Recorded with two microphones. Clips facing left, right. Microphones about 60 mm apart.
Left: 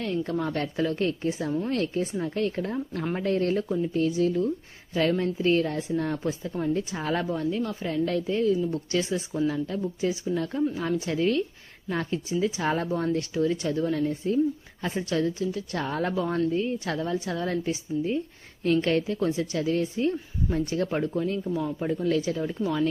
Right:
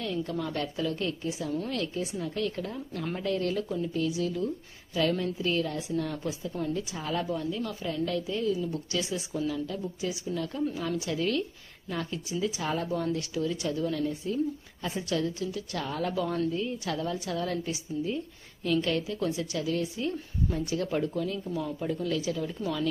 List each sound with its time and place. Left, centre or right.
0.0 s a woman's voice: left
9.3 s a woman's voice: left
9.8 s a woman's voice: left
21.4 s speech: centre
21.8 s a woman's voice: left